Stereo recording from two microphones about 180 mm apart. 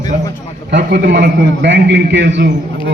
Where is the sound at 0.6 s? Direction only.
75° right (ahead or behind).